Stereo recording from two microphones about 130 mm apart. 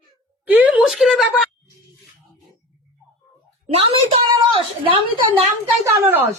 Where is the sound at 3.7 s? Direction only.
45° right (ahead or behind).